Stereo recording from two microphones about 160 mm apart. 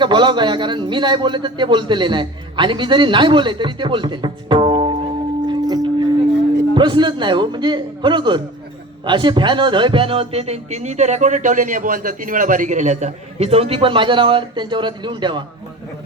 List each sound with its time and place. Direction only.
0.0 s a man's voice: 30° right (ahead or behind)
5.5 s music: 25° right (ahead or behind)
6.7 s a man's voice: 30° right (ahead or behind)